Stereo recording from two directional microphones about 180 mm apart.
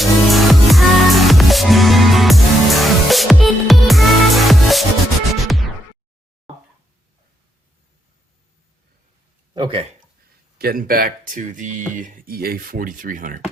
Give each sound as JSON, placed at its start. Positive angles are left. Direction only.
{"t": 0.0, "sound": "music", "side_deg": 0}
{"t": 9.6, "sound": "speech", "side_deg": -30}
{"t": 10.6, "sound": "speech", "side_deg": -55}